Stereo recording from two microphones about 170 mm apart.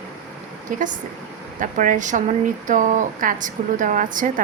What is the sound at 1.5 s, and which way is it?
Speech, 50° right (ahead or behind).